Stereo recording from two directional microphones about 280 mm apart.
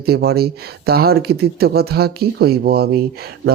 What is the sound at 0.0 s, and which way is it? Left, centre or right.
Speech, right.